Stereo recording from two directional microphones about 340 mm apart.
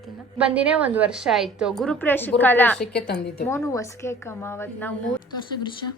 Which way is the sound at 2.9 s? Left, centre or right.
Left.